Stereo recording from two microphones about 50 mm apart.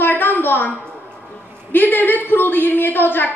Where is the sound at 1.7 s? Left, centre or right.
Left.